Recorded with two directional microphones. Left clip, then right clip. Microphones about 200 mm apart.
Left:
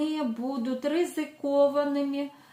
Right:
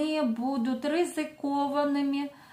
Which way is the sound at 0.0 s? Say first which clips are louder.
Right 2 dB; 35° right (ahead or behind).